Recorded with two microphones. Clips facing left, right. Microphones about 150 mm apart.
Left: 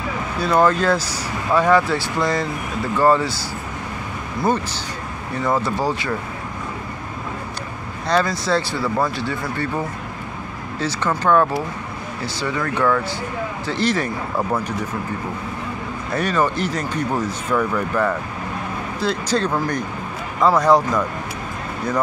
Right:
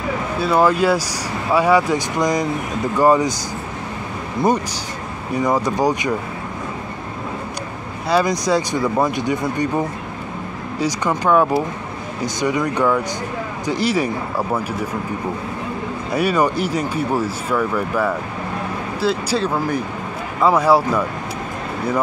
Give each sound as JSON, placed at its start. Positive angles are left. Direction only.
{"t": 0.4, "sound": "speech", "side_deg": -5}
{"t": 5.3, "sound": "speech", "side_deg": -15}
{"t": 8.1, "sound": "speech", "side_deg": -15}
{"t": 10.8, "sound": "speech", "side_deg": -10}
{"t": 16.1, "sound": "speech", "side_deg": -10}